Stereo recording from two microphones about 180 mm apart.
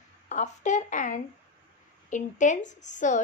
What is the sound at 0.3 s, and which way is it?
A woman's voice, 45° left (ahead or behind).